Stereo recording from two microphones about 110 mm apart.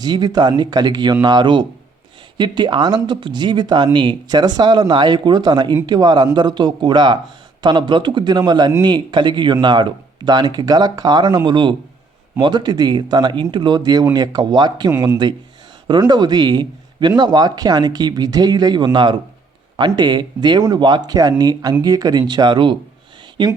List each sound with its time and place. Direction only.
0.0 s speech: 40° right (ahead or behind)